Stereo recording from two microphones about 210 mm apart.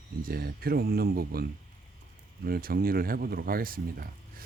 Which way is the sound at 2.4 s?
45° right (ahead or behind).